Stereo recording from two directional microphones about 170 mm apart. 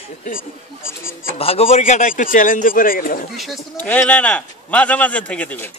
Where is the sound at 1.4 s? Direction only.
35° left (ahead or behind); by 3.2 s 55° left (ahead or behind).